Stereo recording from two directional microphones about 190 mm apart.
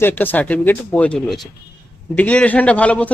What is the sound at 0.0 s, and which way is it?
Speech, 10° left (ahead or behind).